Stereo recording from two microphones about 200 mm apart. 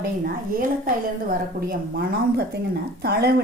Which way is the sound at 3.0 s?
50° right (ahead or behind).